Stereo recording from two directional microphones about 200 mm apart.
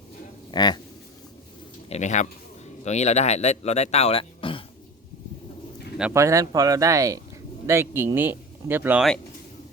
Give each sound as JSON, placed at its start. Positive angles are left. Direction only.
{"t": 0.5, "sound": "speech", "side_deg": 20}
{"t": 1.9, "sound": "speech", "side_deg": 35}
{"t": 6.0, "sound": "speech", "side_deg": -10}